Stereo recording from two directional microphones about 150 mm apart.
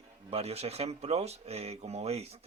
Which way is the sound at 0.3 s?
40° right (ahead or behind).